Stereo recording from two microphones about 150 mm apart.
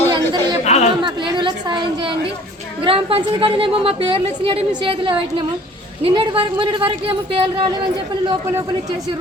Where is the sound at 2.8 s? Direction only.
35° right (ahead or behind).